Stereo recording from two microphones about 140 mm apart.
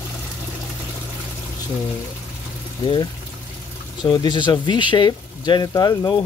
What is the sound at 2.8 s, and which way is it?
Speech, 35° left (ahead or behind).